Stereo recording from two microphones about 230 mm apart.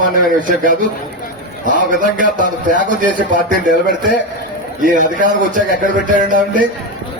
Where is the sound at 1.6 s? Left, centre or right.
Right.